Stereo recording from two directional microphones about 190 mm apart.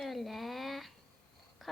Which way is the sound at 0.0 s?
Centre (ahead or behind).